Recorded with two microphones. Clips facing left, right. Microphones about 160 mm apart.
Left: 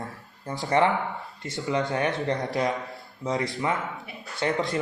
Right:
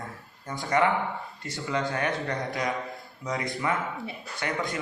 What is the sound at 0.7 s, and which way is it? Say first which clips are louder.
Speech: left 2 dB; 30° left (ahead or behind).